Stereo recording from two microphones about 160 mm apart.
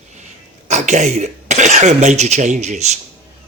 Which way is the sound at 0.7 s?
45° right (ahead or behind).